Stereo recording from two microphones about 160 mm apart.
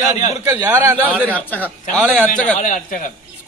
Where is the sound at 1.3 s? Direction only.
10° left (ahead or behind).